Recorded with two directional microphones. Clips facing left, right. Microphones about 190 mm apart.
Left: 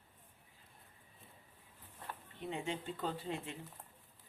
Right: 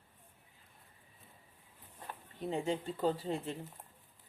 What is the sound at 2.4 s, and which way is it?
Speech, 35° right (ahead or behind).